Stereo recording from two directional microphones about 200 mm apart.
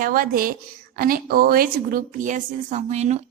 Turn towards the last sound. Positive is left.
turn(degrees=-35)  # may be behind; listen again after turning